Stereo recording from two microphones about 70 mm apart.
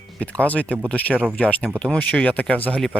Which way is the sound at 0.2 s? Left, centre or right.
Centre.